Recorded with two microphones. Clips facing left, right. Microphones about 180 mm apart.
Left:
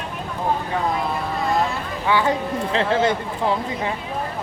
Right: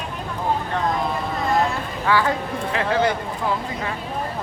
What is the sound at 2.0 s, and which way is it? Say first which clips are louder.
Speech: left 1 dB; 20° left (ahead or behind).